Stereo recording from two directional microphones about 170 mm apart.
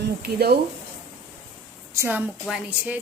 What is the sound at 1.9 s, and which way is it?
A woman's voice, 10° right (ahead or behind).